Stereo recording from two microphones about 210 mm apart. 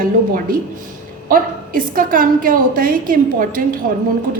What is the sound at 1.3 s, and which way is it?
A woman's voice, 40° right (ahead or behind).